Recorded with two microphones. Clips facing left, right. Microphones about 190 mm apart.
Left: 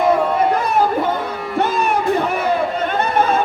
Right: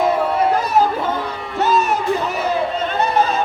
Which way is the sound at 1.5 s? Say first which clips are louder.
Right 1 dB; 60° left (ahead or behind).